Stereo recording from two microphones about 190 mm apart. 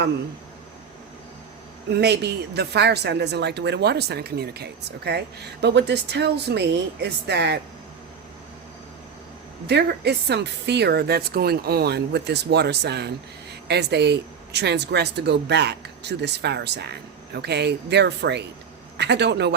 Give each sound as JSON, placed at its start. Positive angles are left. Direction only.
{"t": 2.0, "sound": "speech", "side_deg": -60}
{"t": 9.6, "sound": "speech", "side_deg": -60}